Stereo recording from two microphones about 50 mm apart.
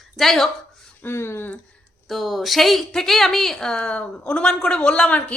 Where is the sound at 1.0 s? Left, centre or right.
Left.